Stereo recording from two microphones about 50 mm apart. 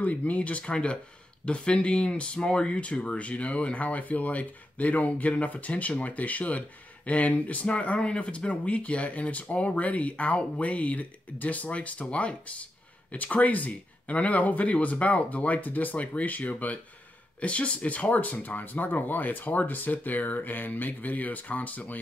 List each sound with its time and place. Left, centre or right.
0.0 s speech: left